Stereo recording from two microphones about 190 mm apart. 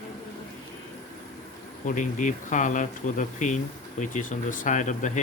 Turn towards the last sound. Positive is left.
turn(degrees=40)  # may be behind; listen again after turning